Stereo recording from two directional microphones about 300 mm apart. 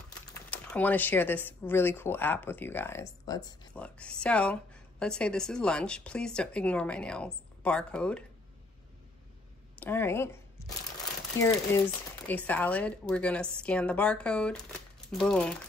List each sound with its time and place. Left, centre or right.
0.5 s speech: centre
9.8 s a woman's voice: centre
11.3 s speech: centre